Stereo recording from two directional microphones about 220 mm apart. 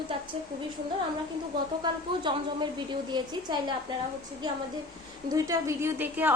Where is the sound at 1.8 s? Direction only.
20° right (ahead or behind).